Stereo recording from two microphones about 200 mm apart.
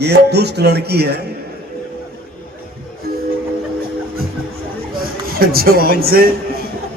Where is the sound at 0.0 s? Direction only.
55° right (ahead or behind).